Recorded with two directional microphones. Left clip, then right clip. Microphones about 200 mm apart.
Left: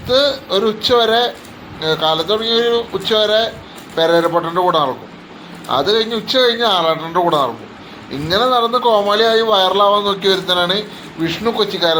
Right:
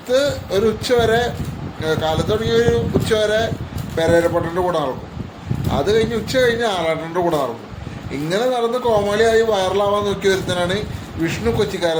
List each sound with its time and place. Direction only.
0.1 s speech: 5° right (ahead or behind)